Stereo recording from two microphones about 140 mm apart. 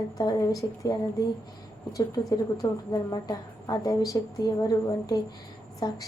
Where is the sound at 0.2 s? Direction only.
25° left (ahead or behind).